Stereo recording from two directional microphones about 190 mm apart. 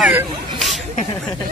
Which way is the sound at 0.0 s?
5° right (ahead or behind).